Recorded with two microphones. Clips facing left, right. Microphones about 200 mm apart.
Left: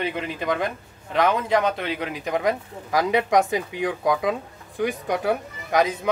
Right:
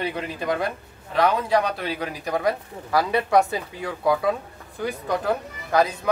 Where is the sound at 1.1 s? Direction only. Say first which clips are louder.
Even; 20° left (ahead or behind).